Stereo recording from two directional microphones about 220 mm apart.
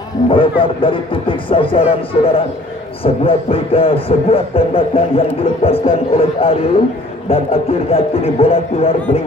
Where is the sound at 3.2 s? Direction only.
25° left (ahead or behind).